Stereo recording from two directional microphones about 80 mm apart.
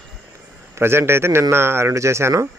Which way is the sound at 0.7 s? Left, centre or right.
Right.